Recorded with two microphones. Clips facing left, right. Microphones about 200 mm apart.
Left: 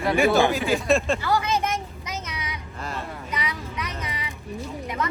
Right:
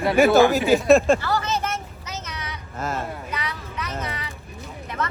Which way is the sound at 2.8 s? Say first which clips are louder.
Right 6 dB; 45° right (ahead or behind).